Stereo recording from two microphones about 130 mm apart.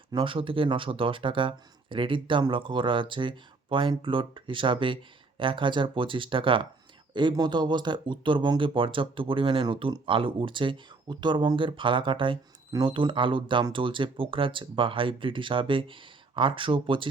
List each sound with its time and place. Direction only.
0.1 s speech: 40° right (ahead or behind)